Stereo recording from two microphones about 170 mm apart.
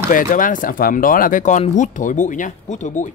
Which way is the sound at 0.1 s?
50° left (ahead or behind).